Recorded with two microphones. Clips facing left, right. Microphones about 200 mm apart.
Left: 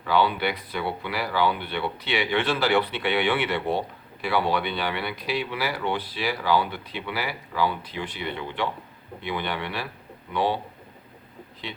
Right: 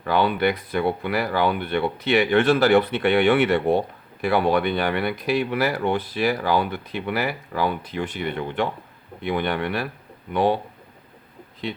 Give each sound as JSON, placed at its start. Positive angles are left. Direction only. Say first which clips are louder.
{"t": 0.0, "sound": "speech", "louder": "right 3 dB", "side_deg": -50}